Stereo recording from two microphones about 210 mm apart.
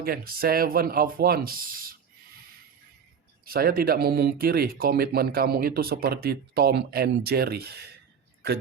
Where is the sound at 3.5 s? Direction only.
45° right (ahead or behind).